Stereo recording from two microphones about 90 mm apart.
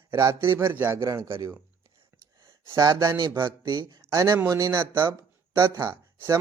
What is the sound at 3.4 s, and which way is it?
Speech, 60° right (ahead or behind).